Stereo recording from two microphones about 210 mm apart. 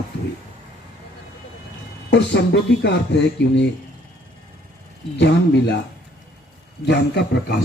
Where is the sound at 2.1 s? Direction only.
55° left (ahead or behind).